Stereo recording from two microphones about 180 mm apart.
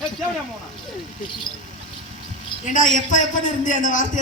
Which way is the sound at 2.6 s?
45° left (ahead or behind).